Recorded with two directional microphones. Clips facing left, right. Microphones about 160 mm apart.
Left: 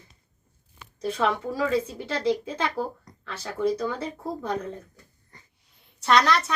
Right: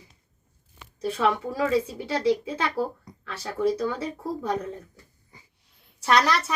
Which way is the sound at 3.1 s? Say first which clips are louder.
Right 4 dB; 10° right (ahead or behind).